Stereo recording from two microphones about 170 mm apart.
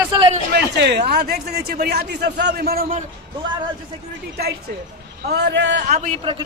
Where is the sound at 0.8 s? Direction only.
80° right; by 3.0 s 60° right (ahead or behind).